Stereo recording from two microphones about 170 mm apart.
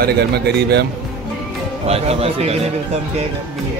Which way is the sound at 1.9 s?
35° right (ahead or behind).